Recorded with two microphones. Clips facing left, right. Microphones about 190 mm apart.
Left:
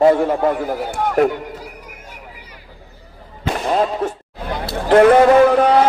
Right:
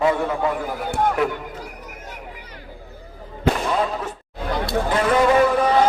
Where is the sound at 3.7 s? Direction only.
45° left (ahead or behind).